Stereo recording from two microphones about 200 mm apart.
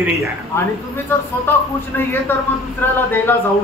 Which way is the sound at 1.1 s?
10° left (ahead or behind).